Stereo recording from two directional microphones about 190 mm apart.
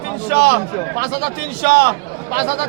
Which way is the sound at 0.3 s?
55° right (ahead or behind).